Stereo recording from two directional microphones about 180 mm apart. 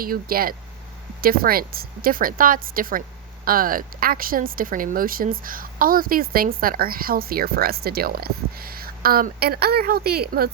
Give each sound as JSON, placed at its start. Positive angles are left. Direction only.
{"t": 0.0, "sound": "a woman's voice", "side_deg": -55}